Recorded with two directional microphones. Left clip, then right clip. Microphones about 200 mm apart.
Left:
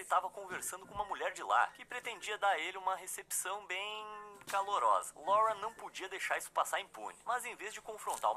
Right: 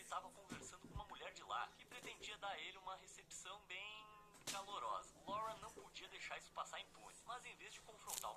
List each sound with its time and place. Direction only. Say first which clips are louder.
0.1 s speech: left 16 dB; 45° left (ahead or behind)